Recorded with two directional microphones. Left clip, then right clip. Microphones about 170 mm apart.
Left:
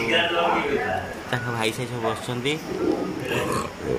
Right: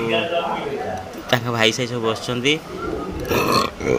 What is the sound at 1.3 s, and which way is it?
Speech, 20° right (ahead or behind).